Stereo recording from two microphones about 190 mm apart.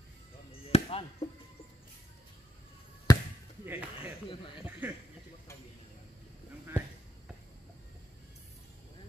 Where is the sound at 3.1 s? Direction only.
20° left (ahead or behind).